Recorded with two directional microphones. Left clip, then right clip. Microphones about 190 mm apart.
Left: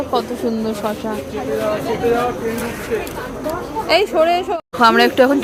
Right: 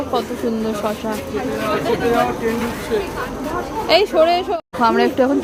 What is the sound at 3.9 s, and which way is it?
Speech, 5° left (ahead or behind).